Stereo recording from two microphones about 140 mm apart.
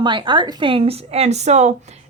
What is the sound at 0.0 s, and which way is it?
Speech, 35° right (ahead or behind).